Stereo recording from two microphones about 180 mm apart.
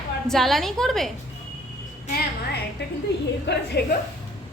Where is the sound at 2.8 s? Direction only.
70° left (ahead or behind).